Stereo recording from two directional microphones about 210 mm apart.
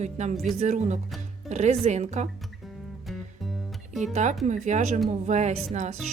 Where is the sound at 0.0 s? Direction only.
35° right (ahead or behind).